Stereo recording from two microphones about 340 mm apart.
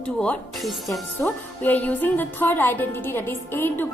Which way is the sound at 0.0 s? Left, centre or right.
Centre.